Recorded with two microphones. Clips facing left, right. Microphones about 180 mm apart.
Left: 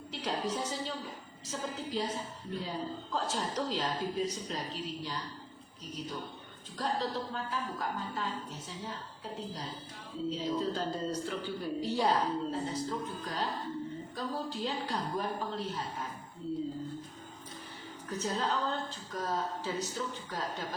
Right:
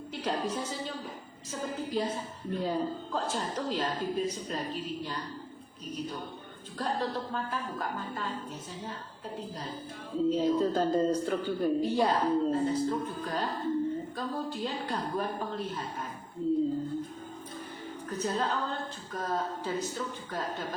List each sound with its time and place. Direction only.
0.1 s a woman's voice: 50° right (ahead or behind)
10.2 s a woman's voice: 50° right (ahead or behind)
18.1 s a woman's voice: 50° right (ahead or behind)